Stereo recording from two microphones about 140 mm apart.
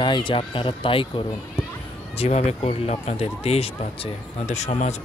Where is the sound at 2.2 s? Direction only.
50° left (ahead or behind).